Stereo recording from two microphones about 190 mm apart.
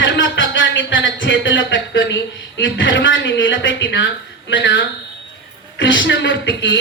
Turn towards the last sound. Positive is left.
turn(degrees=70)  # may be behind; listen again after turning